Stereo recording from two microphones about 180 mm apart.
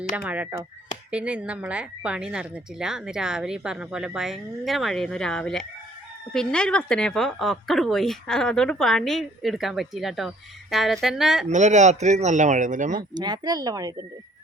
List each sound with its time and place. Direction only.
0.2 s a woman's voice: 10° right (ahead or behind)
11.4 s speech: 40° right (ahead or behind)
13.0 s speech: 25° right (ahead or behind)